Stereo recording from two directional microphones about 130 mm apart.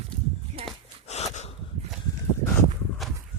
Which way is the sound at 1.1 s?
60° left (ahead or behind).